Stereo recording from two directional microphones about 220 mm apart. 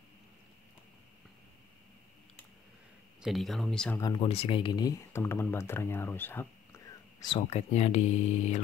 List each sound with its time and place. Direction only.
3.2 s speech: centre (ahead or behind)
4.0 s speech: 20° left (ahead or behind)
7.2 s speech: 25° left (ahead or behind)